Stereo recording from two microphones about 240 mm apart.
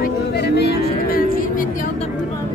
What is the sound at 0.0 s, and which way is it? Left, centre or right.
Music, left.